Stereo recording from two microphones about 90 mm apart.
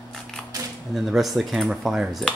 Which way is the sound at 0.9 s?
Centre (ahead or behind).